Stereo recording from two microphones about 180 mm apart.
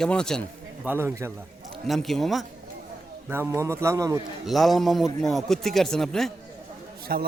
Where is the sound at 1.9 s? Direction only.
Centre (ahead or behind).